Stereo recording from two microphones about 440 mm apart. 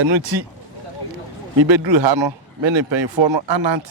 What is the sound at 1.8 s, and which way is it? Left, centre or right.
Speech, right.